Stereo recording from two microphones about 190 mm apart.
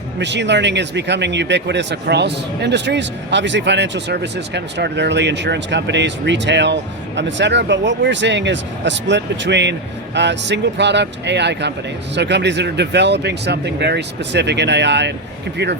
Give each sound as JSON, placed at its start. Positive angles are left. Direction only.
{"t": 0.2, "sound": "speech", "side_deg": -65}